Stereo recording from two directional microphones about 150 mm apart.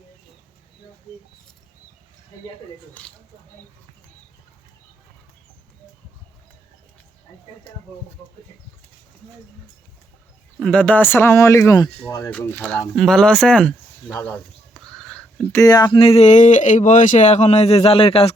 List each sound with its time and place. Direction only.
10.6 s speech: 10° left (ahead or behind)
14.1 s a sound: 10° left (ahead or behind)
15.5 s speech: 25° left (ahead or behind)
16.0 s speech: 40° left (ahead or behind)